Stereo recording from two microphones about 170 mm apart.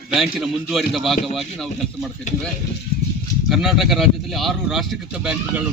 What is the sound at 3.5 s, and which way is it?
A man's voice, centre (ahead or behind).